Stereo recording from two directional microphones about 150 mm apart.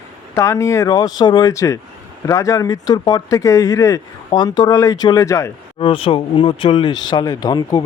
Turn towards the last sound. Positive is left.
turn(degrees=25)  # may be behind; listen again after turning